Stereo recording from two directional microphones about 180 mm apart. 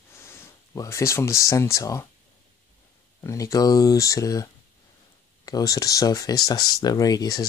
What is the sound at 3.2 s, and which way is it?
Speech, 20° left (ahead or behind).